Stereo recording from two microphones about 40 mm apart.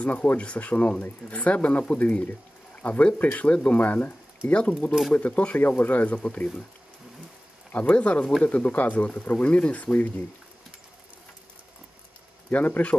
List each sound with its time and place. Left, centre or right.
0.0 s speech: left
7.8 s speech: left
12.4 s speech: left